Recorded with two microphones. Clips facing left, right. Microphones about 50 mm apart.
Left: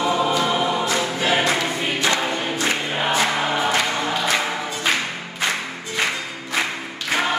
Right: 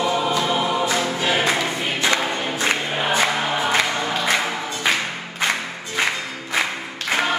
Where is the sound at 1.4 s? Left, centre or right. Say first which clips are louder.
Even; right.